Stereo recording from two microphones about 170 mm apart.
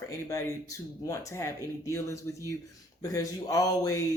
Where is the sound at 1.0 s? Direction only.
20° left (ahead or behind).